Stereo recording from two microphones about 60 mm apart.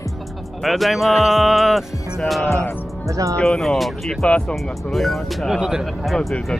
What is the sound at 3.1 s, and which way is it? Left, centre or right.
Speech, right.